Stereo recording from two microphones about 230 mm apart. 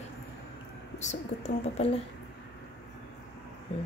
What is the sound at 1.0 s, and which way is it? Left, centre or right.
Speech, left.